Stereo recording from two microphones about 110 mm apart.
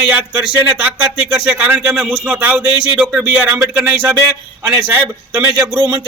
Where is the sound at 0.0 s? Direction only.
15° right (ahead or behind).